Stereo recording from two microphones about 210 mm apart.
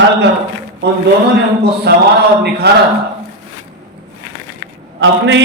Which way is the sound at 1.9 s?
50° right (ahead or behind).